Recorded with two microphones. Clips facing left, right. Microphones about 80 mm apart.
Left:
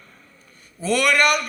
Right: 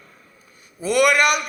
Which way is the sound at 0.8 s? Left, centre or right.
Centre.